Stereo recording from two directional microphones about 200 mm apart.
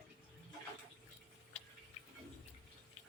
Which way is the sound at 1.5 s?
30° left (ahead or behind).